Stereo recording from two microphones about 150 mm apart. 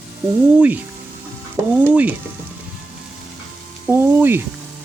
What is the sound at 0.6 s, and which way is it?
Speech, 10° right (ahead or behind).